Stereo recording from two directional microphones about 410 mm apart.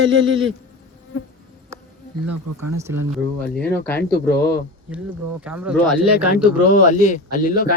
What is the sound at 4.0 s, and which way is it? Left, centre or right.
Speech, left.